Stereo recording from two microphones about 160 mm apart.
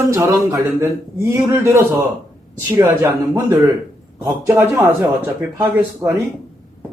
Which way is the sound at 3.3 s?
20° right (ahead or behind).